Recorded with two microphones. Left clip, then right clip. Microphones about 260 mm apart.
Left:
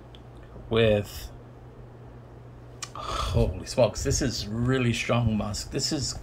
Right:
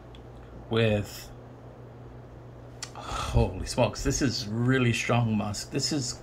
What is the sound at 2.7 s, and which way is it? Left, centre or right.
Speech, centre.